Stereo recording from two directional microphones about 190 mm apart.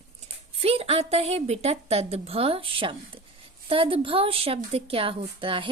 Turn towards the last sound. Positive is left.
turn(degrees=-25)  # may be behind; listen again after turning